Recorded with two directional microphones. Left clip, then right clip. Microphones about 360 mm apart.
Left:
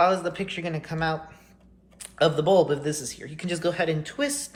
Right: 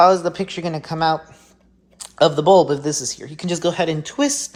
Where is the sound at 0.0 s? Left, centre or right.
Centre.